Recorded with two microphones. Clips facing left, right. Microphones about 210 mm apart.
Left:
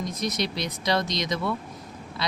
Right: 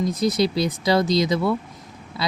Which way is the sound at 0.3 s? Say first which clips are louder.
Right 9 dB; 30° right (ahead or behind).